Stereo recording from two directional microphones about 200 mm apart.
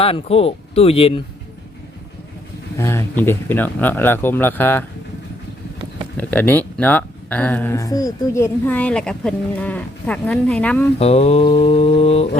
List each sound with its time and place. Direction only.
0.0 s speech: 30° left (ahead or behind)
2.7 s speech: 15° left (ahead or behind)
6.1 s speech: 10° left (ahead or behind)
10.9 s speech: 30° left (ahead or behind)